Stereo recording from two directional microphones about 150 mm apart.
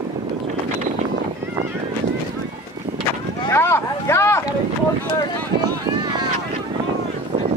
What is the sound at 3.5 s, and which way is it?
Speech, 15° left (ahead or behind).